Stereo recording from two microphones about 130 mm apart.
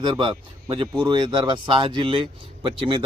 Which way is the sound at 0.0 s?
40° right (ahead or behind).